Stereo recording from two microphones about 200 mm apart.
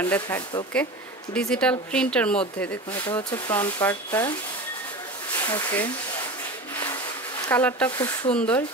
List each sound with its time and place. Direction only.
0.0 s speech: 10° left (ahead or behind)
3.0 s speech: 20° left (ahead or behind)
5.3 s speech: 15° left (ahead or behind)
7.4 s speech: 10° left (ahead or behind)